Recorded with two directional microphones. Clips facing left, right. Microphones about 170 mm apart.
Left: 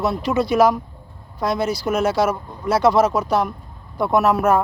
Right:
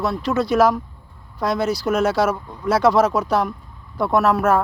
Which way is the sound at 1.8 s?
10° left (ahead or behind).